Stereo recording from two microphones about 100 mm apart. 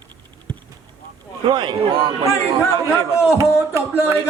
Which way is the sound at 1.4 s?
50° right (ahead or behind).